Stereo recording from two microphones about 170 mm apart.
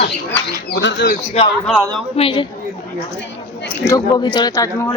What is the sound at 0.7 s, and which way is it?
Speech, 80° left.